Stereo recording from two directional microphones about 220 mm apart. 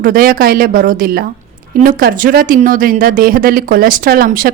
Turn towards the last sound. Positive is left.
turn(degrees=-40)  # may be behind; listen again after turning